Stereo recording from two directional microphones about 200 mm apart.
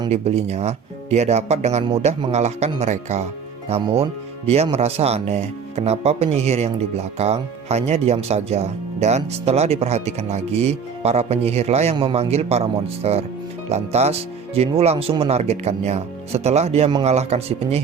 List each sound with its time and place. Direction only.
0.1 s speech: 30° right (ahead or behind)